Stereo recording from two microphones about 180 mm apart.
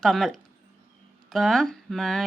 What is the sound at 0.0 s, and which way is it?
Speech, centre (ahead or behind).